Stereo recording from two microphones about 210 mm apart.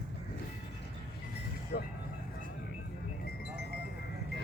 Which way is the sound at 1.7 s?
45° left (ahead or behind).